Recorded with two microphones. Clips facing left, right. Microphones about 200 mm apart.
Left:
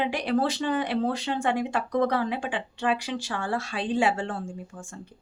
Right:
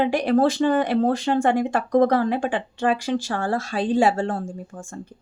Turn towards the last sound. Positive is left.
turn(degrees=-45)  # may be behind; listen again after turning